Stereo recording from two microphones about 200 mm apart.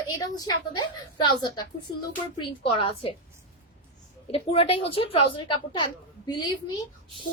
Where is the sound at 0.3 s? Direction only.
20° left (ahead or behind).